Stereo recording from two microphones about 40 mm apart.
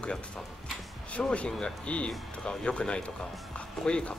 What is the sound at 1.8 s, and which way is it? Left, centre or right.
Speech, left.